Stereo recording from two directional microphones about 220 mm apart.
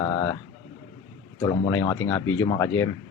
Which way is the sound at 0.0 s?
15° left (ahead or behind).